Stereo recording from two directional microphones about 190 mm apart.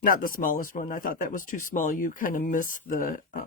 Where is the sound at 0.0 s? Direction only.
45° left (ahead or behind).